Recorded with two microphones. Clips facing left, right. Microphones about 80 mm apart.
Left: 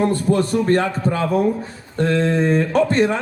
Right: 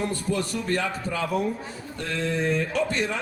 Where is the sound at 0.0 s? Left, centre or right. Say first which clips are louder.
Left 9 dB; left.